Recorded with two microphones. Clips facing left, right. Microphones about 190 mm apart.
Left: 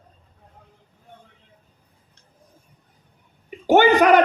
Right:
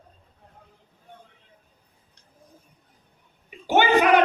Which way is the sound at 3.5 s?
50° left (ahead or behind).